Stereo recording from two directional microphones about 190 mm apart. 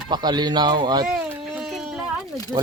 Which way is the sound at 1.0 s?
5° right (ahead or behind).